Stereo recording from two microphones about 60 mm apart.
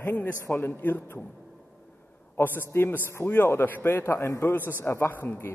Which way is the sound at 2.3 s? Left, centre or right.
Left.